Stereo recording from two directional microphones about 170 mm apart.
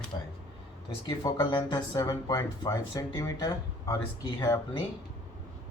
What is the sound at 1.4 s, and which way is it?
Speech, 25° left (ahead or behind).